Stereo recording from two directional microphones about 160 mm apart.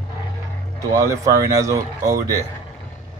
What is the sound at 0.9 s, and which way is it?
Speech, 20° right (ahead or behind).